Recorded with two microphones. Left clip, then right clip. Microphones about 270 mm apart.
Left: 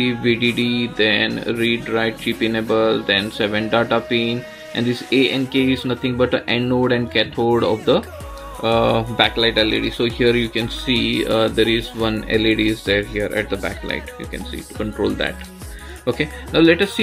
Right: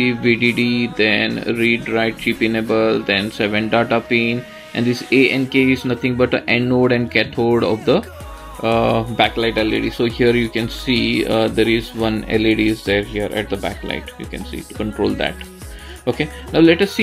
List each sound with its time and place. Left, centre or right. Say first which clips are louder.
0.0 s speech: right 2 dB; centre